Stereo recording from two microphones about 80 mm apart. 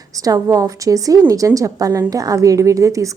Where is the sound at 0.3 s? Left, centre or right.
Right.